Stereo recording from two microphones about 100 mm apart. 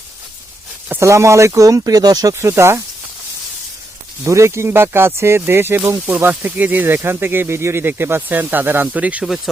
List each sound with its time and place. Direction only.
0.9 s speech: 25° right (ahead or behind)
2.4 s speech: 25° right (ahead or behind)
4.2 s speech: 30° right (ahead or behind)